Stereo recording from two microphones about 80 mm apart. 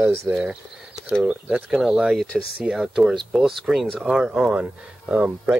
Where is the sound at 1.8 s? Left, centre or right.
Centre.